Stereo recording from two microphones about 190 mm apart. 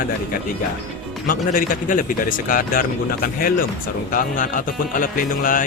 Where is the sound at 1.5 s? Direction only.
45° left (ahead or behind).